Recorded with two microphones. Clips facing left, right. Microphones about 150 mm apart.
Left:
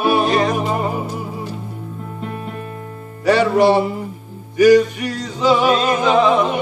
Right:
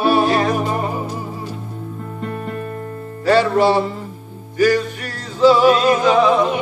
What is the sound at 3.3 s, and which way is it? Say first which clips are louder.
Music: left 1 dB; 15° left (ahead or behind).